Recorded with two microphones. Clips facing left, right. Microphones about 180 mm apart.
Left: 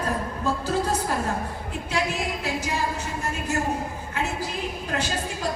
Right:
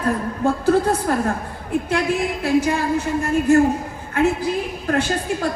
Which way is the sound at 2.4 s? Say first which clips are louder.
Right 14 dB; 55° right (ahead or behind).